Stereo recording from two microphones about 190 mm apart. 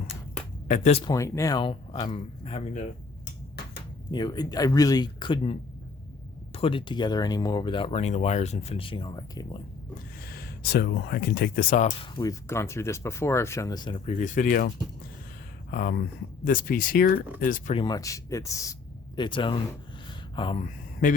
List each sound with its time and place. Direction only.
0.7 s speech: 35° left (ahead or behind)
1.0 s speech: 15° left (ahead or behind)
4.1 s speech: 20° left (ahead or behind)
10.3 s speech: 55° left (ahead or behind)
11.9 s speech: 25° left (ahead or behind)
14.2 s speech: 40° left (ahead or behind)
15.7 s speech: 50° left (ahead or behind)
17.7 s speech: 20° left (ahead or behind)
21.0 s speech: 45° left (ahead or behind)